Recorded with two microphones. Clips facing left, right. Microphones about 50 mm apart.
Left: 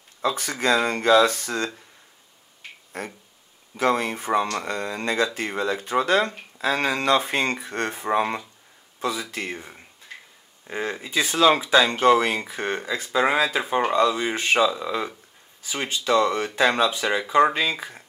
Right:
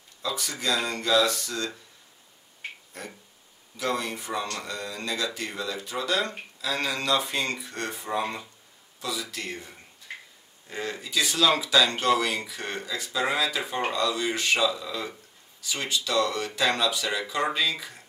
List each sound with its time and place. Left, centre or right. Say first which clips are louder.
0.2 s speech: left 7 dB; left
2.9 s speech: left 7 dB; left
9.2 s speech: left 4 dB; left